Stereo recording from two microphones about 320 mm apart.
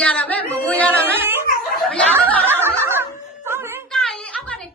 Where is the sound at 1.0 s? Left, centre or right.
Centre.